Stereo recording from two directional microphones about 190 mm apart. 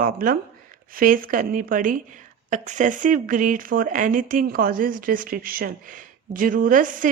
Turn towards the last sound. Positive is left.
turn(degrees=-45)  # may be behind; listen again after turning